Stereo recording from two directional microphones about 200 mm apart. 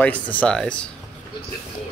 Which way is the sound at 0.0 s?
5° left (ahead or behind).